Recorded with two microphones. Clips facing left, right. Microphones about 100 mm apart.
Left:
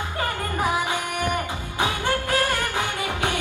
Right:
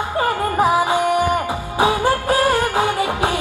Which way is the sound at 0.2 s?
30° right (ahead or behind).